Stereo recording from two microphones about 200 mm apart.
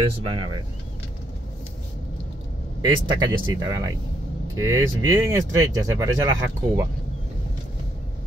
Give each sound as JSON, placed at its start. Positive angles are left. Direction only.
{"t": 0.3, "sound": "speech", "side_deg": -25}
{"t": 2.8, "sound": "speech", "side_deg": -15}